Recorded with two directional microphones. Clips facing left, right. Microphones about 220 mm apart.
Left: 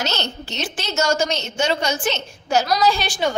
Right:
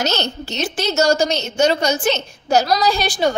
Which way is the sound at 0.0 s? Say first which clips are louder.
Right 4 dB; 40° right (ahead or behind).